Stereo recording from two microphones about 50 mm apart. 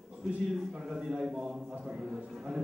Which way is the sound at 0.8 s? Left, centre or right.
Centre.